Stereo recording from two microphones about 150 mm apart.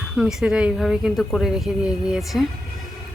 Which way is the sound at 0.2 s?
5° right (ahead or behind).